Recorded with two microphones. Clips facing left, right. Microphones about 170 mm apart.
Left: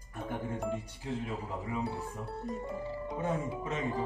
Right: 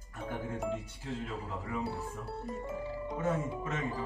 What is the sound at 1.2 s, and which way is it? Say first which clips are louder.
Speech: left 2 dB; 15° left (ahead or behind).